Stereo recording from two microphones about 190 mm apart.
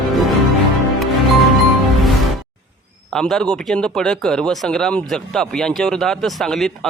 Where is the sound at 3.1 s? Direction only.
5° left (ahead or behind).